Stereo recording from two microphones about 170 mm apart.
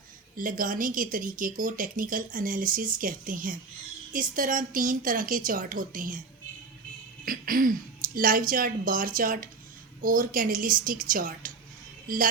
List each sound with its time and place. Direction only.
0.3 s speech: 55° right (ahead or behind)
7.3 s speech: 55° right (ahead or behind)